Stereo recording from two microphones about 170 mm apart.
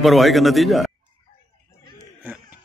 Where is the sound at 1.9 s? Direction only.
10° right (ahead or behind).